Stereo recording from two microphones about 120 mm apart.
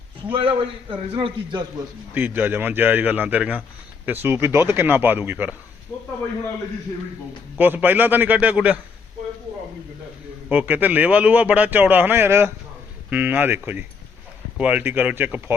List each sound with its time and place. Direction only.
0.3 s a man's voice: 45° right (ahead or behind)
2.1 s a man's voice: 15° right (ahead or behind)
7.6 s a man's voice: 15° right (ahead or behind)
10.5 s a man's voice: 15° right (ahead or behind)